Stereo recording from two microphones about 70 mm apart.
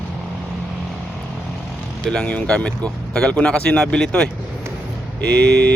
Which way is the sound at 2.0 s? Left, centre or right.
Centre.